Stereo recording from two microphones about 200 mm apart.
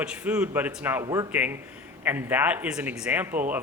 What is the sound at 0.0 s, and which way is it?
A man's voice, 5° right (ahead or behind).